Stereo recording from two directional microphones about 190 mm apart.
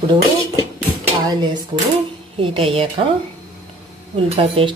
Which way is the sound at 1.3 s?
25° right (ahead or behind).